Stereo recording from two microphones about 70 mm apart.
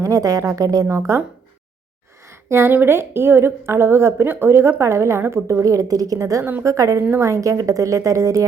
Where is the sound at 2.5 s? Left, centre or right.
Right.